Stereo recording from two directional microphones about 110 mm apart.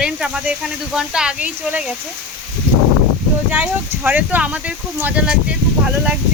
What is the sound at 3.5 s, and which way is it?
Speech, 15° right (ahead or behind).